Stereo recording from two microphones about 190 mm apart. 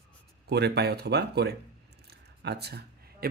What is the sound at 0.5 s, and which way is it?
Speech, 60° right (ahead or behind).